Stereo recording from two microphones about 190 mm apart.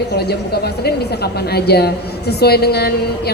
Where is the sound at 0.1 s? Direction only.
60° left (ahead or behind).